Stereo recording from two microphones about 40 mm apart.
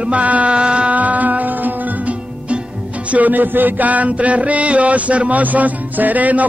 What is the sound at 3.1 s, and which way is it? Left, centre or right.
Music, right.